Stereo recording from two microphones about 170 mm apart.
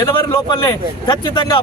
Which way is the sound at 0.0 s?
20° left (ahead or behind).